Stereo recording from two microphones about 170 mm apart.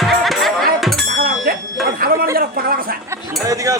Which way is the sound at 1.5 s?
60° right (ahead or behind).